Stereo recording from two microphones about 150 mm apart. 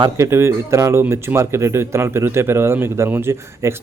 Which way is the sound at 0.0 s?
20° right (ahead or behind).